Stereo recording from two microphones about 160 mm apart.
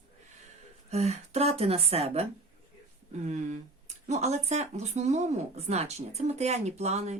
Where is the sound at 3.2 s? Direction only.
45° right (ahead or behind).